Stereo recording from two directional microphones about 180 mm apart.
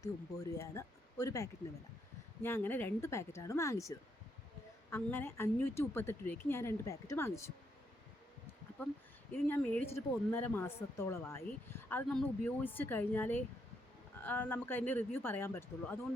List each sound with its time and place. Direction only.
0.0 s speech: 20° left (ahead or behind)
9.3 s speech: 10° left (ahead or behind)